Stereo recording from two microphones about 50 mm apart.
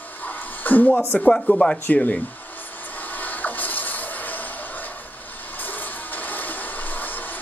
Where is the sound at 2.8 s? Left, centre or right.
Left.